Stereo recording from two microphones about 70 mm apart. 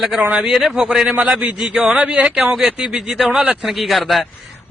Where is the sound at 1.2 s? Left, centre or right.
Right.